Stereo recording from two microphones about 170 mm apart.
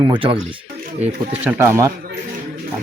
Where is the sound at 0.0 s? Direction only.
30° right (ahead or behind).